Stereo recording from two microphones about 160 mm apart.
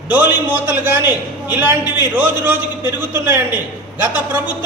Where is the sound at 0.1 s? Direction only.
10° right (ahead or behind).